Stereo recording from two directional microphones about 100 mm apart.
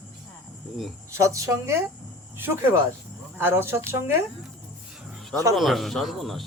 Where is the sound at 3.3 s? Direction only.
25° right (ahead or behind).